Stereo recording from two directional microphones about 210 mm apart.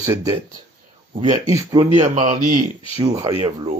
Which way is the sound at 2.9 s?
15° right (ahead or behind).